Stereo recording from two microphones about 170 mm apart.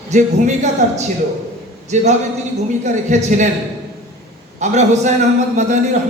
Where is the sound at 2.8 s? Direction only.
45° right (ahead or behind).